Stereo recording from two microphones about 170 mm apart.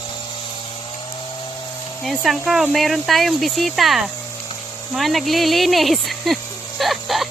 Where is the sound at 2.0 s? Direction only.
Centre (ahead or behind).